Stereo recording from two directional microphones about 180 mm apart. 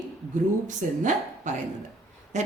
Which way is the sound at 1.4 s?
45° right (ahead or behind).